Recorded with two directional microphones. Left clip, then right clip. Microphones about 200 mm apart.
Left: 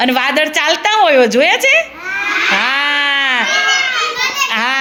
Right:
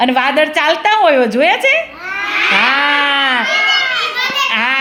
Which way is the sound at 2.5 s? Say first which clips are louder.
Right 2 dB; 5° left (ahead or behind).